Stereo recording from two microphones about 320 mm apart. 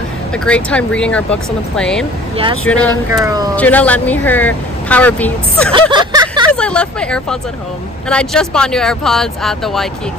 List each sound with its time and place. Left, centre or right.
0.5 s speech: centre
3.1 s speech: centre
3.5 s speech: centre
5.7 s a sound: centre
6.5 s speech: centre